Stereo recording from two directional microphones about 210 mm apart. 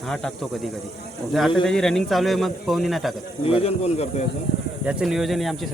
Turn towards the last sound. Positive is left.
turn(degrees=0)  # may be behind; listen again after turning